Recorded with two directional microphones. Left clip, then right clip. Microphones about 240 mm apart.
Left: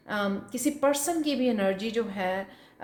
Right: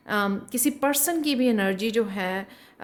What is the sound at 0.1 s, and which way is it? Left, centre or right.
A woman's voice, right.